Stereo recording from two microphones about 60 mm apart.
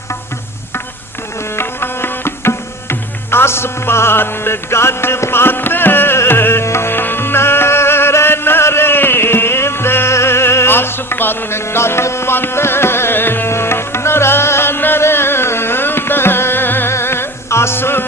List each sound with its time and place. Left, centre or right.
1.5 s music: left